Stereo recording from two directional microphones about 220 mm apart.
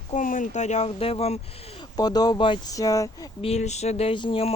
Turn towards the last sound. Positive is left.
turn(degrees=25)  # may be behind; listen again after turning